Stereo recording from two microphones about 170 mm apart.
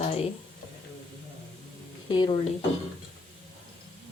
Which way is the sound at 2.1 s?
25° left (ahead or behind).